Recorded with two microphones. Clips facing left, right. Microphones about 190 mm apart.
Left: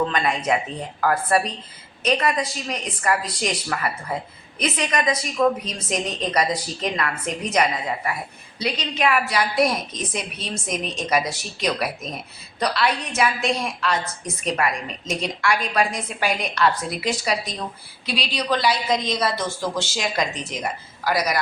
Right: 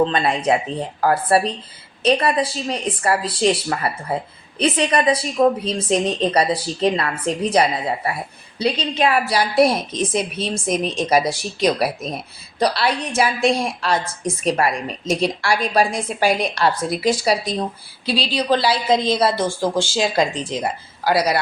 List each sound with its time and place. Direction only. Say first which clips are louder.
0.0 s a woman's voice: right 4 dB; 30° right (ahead or behind)